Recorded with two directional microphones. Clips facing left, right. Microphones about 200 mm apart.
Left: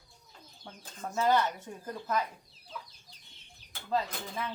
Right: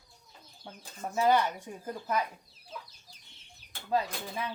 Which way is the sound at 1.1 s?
15° right (ahead or behind).